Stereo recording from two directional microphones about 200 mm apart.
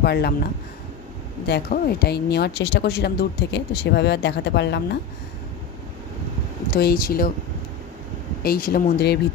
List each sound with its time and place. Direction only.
0.0 s speech: 55° left (ahead or behind)
1.5 s speech: 50° left (ahead or behind)
6.7 s speech: 50° left (ahead or behind)
8.4 s speech: 50° left (ahead or behind)